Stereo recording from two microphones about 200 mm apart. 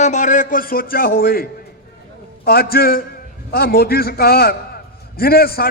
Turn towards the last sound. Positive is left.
turn(degrees=50)  # may be behind; listen again after turning